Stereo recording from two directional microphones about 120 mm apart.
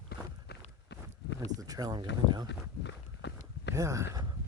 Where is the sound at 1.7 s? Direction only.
30° right (ahead or behind).